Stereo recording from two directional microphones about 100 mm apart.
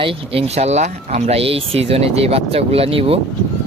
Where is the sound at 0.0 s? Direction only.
70° right (ahead or behind).